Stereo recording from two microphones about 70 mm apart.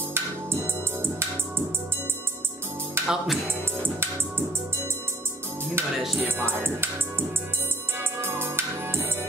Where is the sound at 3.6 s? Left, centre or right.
Right.